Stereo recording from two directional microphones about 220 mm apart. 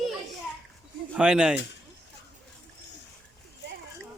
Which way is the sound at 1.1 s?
5° right (ahead or behind).